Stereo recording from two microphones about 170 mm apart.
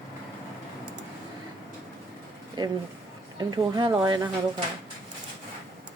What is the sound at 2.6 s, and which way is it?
Speech, 25° right (ahead or behind).